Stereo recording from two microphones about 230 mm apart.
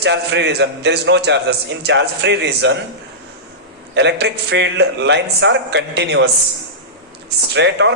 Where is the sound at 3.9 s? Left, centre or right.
Right.